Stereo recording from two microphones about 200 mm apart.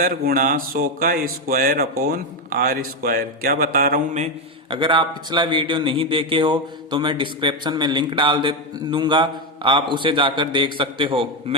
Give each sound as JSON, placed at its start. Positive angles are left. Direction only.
{"t": 0.0, "sound": "speech", "side_deg": -45}
{"t": 4.7, "sound": "a man's voice", "side_deg": -25}